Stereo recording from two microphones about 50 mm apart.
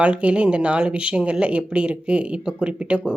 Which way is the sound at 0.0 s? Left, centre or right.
Right.